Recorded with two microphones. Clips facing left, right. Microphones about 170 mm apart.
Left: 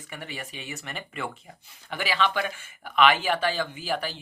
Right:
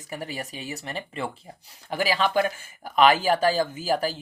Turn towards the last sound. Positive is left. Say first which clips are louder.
# right 5 dB
turn(degrees=-40)  # may be behind; listen again after turning